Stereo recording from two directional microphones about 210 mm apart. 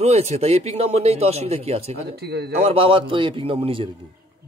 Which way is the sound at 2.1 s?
50° right (ahead or behind).